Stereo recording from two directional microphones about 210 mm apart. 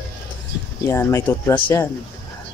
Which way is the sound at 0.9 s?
10° left (ahead or behind).